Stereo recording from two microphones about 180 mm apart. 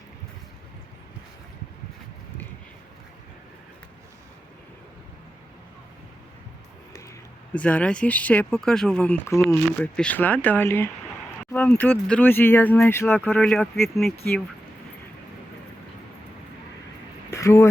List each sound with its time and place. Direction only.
7.5 s speech: 5° left (ahead or behind)
17.3 s speech: 15° left (ahead or behind)